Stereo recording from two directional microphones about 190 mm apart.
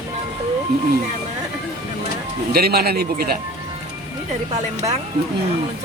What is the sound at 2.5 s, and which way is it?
Speech, 55° right (ahead or behind).